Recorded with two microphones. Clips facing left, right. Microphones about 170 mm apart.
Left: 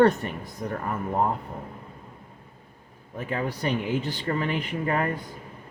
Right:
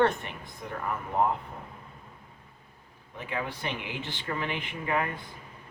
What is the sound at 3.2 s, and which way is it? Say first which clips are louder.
Speech: left 5 dB; 40° left (ahead or behind).